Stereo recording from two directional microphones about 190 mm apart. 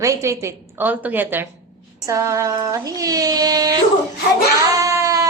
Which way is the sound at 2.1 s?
15° right (ahead or behind).